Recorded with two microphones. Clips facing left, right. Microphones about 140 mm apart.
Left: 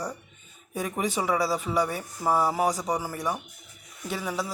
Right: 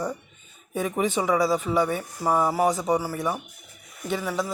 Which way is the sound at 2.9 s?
10° right (ahead or behind).